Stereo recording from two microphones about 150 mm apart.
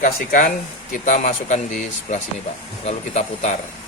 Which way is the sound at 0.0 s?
60° left (ahead or behind).